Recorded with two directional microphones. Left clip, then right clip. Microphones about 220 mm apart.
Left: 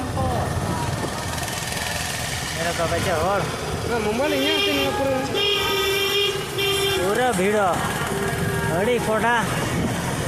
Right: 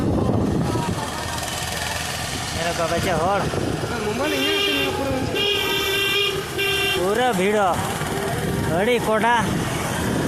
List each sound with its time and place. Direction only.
3.1 s speech: 15° right (ahead or behind)
7.1 s speech: 15° right (ahead or behind)
8.8 s speech: 20° right (ahead or behind)